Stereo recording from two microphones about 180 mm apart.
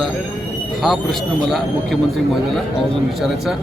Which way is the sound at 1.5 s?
Centre (ahead or behind).